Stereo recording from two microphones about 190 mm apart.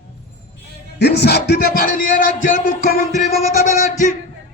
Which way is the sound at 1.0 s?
60° left (ahead or behind).